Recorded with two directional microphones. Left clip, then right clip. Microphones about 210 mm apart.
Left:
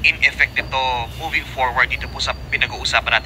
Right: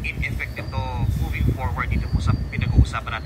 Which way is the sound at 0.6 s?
25° left (ahead or behind).